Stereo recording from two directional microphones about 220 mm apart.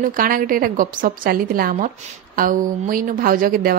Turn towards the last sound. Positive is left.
turn(degrees=-40)  # may be behind; listen again after turning